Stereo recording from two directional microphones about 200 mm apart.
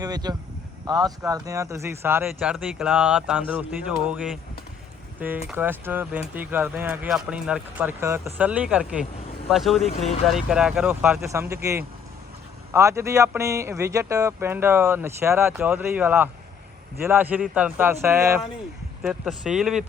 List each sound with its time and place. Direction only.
0.0 s speech: 20° right (ahead or behind)
5.5 s speech: 10° right (ahead or behind)